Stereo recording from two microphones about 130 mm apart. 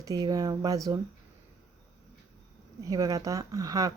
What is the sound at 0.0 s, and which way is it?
Speech, 30° right (ahead or behind).